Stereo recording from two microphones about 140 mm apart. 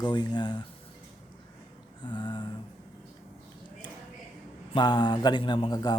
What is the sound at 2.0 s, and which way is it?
Speech, 35° left (ahead or behind).